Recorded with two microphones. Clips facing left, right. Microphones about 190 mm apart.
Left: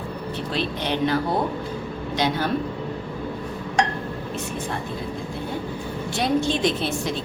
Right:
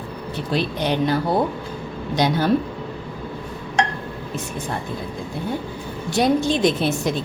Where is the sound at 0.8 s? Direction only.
40° right (ahead or behind).